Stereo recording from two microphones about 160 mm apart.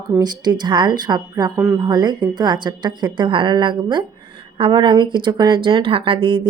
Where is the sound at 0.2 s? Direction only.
25° right (ahead or behind).